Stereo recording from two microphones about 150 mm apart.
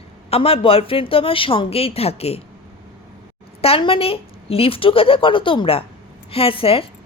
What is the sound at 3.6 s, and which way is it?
Speech, 40° left (ahead or behind).